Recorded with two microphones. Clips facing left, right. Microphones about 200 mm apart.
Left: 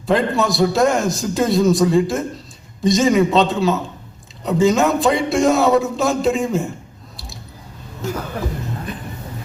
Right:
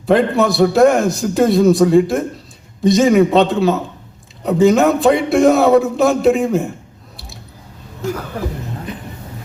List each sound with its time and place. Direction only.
0.0 s a man's voice: 60° right (ahead or behind)